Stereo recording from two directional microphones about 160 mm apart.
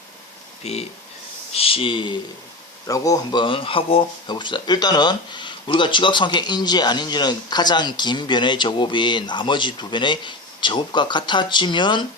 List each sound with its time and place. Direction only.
0.6 s a sound: 40° left (ahead or behind)
2.8 s speech: 20° left (ahead or behind)
3.4 s speech: 35° left (ahead or behind)